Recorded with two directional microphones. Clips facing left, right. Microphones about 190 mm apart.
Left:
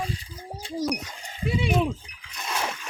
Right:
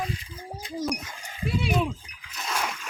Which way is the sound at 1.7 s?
30° left (ahead or behind).